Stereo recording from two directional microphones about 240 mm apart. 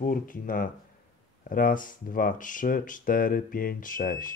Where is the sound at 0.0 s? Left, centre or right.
Left.